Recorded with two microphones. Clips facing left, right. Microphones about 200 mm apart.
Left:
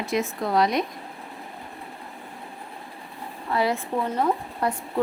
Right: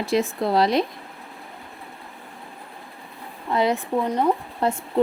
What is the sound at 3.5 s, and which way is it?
Speech, 20° right (ahead or behind).